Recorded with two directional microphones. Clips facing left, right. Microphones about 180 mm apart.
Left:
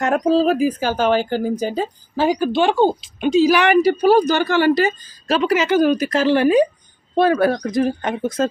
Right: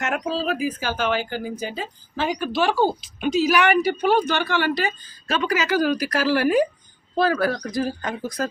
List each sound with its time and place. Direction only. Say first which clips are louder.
0.0 s speech: left 9 dB; 40° left (ahead or behind)
5.4 s speech: left 5 dB; 25° left (ahead or behind)